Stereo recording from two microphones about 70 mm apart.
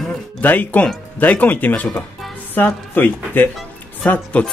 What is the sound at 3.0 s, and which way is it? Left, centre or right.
Speech, left.